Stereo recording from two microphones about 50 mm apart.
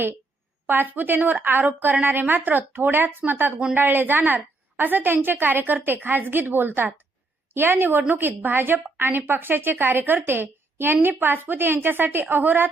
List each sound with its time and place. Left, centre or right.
0.7 s a woman's voice: right